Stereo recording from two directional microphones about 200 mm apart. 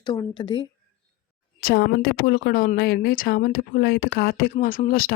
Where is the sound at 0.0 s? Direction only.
20° left (ahead or behind).